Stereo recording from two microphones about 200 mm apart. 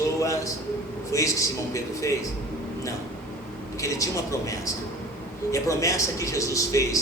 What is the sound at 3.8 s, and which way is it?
Speech, 15° left (ahead or behind).